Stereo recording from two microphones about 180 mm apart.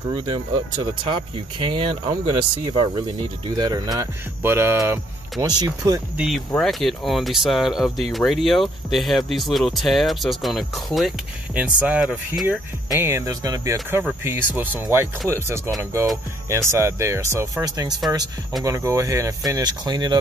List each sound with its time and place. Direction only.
1.0 s speech: 25° right (ahead or behind)
6.1 s speech: centre (ahead or behind)
12.9 s speech: 15° right (ahead or behind)